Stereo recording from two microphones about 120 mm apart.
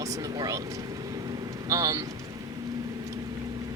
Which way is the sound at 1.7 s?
30° right (ahead or behind).